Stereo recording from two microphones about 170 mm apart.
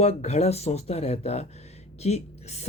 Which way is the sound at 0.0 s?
40° left (ahead or behind).